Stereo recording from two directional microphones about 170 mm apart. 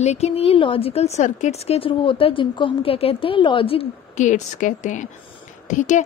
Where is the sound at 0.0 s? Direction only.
40° left (ahead or behind).